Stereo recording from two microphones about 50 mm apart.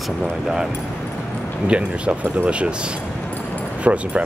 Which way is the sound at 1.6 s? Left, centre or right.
Right.